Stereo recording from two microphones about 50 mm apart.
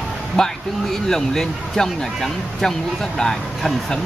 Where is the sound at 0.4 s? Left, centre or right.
Centre.